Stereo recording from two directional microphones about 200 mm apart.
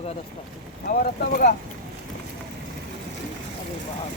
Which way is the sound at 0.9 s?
45° left (ahead or behind).